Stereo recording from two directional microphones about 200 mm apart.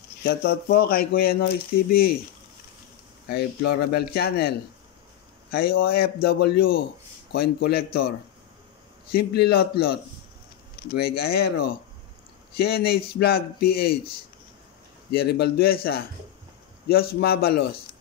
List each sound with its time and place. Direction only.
0.2 s speech: 50° left (ahead or behind)
3.3 s speech: 55° left (ahead or behind)
9.1 s speech: 55° left (ahead or behind)